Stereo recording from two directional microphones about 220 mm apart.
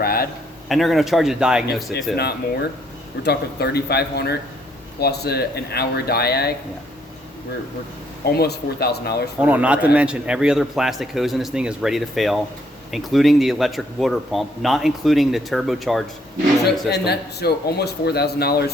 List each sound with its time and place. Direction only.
0.0 s a sound: 45° left (ahead or behind)
0.7 s a man's voice: centre (ahead or behind)
2.1 s speech: 50° left (ahead or behind)
8.3 s speech: 45° left (ahead or behind)
9.4 s a man's voice: 5° right (ahead or behind)
16.9 s speech: 45° left (ahead or behind)